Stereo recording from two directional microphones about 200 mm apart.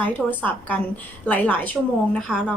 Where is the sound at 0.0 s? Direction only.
10° left (ahead or behind).